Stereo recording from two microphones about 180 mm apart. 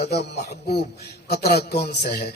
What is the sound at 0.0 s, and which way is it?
A man's voice, 65° left (ahead or behind).